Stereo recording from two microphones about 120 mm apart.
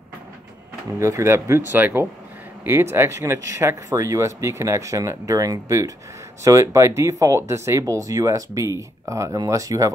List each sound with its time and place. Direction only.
0.9 s speech: 25° right (ahead or behind)